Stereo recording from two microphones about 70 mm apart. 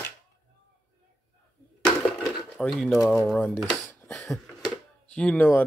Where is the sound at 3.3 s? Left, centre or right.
Centre.